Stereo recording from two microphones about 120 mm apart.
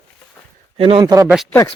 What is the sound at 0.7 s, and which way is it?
Speech, 50° right (ahead or behind).